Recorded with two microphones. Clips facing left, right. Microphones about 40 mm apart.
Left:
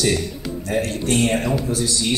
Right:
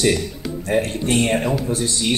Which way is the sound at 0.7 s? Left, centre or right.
Right.